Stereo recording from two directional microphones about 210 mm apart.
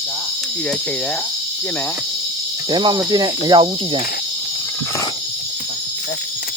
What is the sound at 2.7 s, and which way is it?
Speech, 20° right (ahead or behind).